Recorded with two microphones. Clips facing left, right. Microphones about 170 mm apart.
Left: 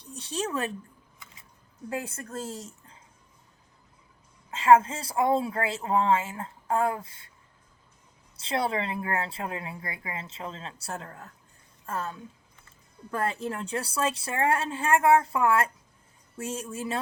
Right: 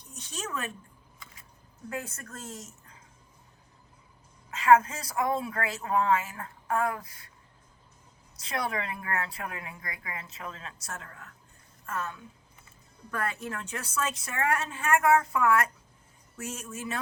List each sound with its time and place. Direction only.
0.0 s speech: 30° left (ahead or behind)
1.9 s a woman's voice: 30° left (ahead or behind)
4.5 s a woman's voice: 30° left (ahead or behind)
8.4 s a woman's voice: 30° left (ahead or behind)